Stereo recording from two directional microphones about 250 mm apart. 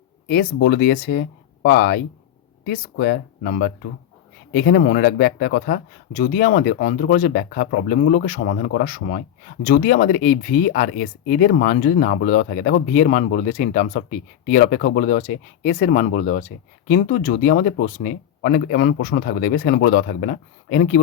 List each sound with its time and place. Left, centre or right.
0.3 s speech: left